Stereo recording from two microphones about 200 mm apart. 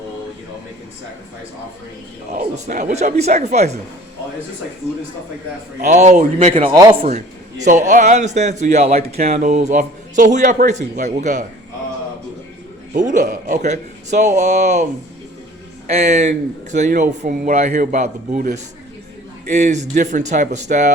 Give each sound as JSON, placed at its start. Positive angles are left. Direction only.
{"t": 2.3, "sound": "speech", "side_deg": -35}
{"t": 5.8, "sound": "speech", "side_deg": -35}
{"t": 7.6, "sound": "speech", "side_deg": -35}
{"t": 12.9, "sound": "speech", "side_deg": -40}
{"t": 15.9, "sound": "speech", "side_deg": -35}